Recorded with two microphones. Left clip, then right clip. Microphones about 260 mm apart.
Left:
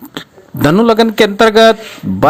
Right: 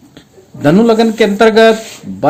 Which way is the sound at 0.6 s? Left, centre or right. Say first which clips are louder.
Even; left.